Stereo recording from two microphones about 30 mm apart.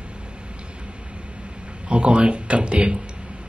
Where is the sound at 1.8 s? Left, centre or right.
Right.